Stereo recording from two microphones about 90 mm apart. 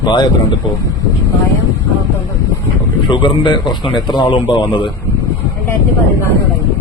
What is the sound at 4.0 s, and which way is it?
Speech, 55° left (ahead or behind).